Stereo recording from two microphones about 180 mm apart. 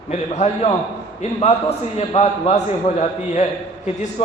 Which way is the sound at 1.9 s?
35° left (ahead or behind).